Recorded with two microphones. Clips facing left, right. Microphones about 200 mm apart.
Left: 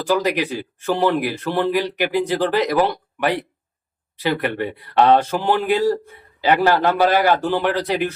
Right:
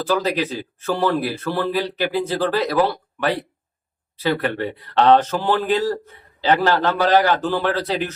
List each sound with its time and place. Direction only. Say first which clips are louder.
0.0 s speech: left 1 dB; 15° left (ahead or behind)